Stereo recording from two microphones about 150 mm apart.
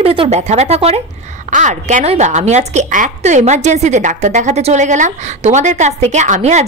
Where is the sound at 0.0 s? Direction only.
40° right (ahead or behind).